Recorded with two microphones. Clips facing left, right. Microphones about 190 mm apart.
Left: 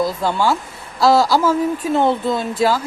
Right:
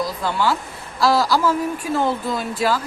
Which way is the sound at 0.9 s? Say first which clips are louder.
Left 4 dB; 25° left (ahead or behind).